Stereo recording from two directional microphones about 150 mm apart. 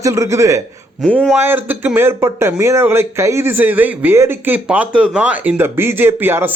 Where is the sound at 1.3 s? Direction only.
15° right (ahead or behind).